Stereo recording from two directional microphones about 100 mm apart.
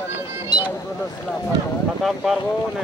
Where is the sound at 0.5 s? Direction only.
40° left (ahead or behind).